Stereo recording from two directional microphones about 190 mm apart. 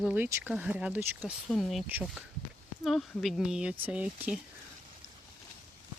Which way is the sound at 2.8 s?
Centre (ahead or behind).